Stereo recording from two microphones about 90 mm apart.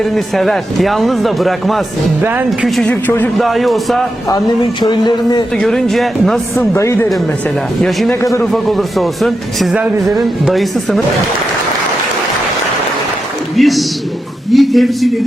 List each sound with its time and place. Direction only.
0.0 s speech: centre (ahead or behind)
2.8 s speech: 20° left (ahead or behind)
3.3 s speech: centre (ahead or behind)
4.8 s speech: 55° left (ahead or behind)
5.5 s speech: 5° left (ahead or behind)
6.7 s speech: 30° left (ahead or behind)
7.9 s speech: centre (ahead or behind)
13.6 s a man's voice: centre (ahead or behind)